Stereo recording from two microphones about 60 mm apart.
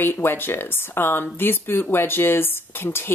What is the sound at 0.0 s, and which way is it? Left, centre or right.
Speech, left.